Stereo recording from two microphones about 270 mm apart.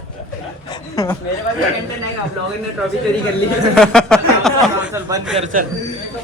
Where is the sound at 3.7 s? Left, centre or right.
Centre.